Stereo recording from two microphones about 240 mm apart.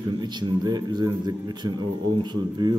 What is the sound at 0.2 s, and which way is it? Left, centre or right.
A man's voice, centre.